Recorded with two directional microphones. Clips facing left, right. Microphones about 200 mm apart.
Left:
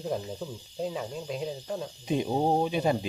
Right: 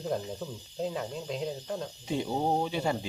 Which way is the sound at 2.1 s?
20° left (ahead or behind).